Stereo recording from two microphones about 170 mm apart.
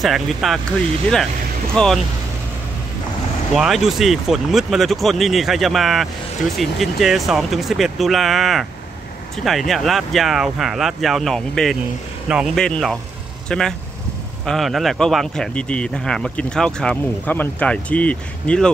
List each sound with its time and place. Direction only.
0.0 s speech: centre (ahead or behind)
1.7 s speech: 5° left (ahead or behind)
3.5 s speech: centre (ahead or behind)
12.6 s speech: 5° left (ahead or behind)